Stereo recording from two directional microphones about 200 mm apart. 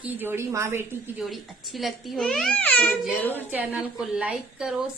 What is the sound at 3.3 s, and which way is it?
A woman's voice, 5° right (ahead or behind).